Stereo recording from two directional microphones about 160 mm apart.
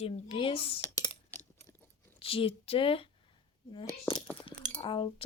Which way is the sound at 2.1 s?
35° left (ahead or behind).